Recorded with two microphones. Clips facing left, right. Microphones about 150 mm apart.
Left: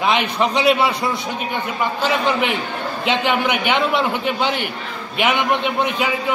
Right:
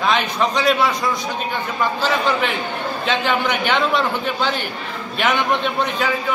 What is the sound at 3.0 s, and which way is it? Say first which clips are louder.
A man's voice: left 2 dB; 15° left (ahead or behind).